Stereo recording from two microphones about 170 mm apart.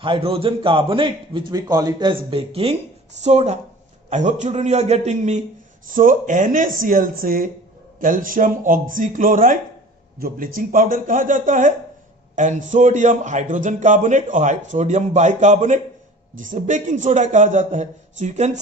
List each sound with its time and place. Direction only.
0.0 s a man's voice: 30° right (ahead or behind)